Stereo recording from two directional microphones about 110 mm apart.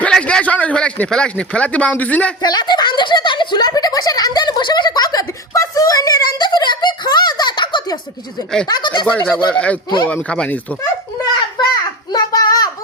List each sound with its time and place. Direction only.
0.0 s a man's voice: 10° left (ahead or behind)
2.4 s a sound: 40° left (ahead or behind)
8.6 s speech: 40° left (ahead or behind)
9.1 s a man's voice: 10° left (ahead or behind)
12.1 s child singing: 35° left (ahead or behind)